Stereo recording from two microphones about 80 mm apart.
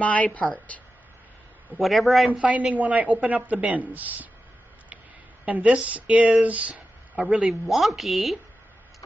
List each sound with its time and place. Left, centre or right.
0.0 s a woman's voice: centre
1.8 s speech: centre
2.4 s a woman's voice: centre
5.4 s speech: centre
7.6 s speech: centre